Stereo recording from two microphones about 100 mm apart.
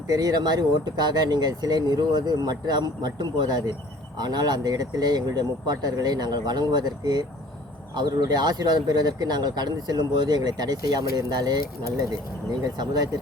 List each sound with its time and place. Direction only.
0.1 s speech: 40° right (ahead or behind)